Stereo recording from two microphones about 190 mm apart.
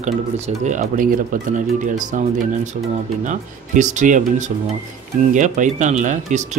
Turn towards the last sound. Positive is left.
turn(degrees=-40)  # may be behind; listen again after turning